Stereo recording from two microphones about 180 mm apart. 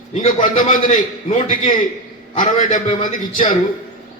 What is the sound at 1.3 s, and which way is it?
A man's voice, 40° left (ahead or behind).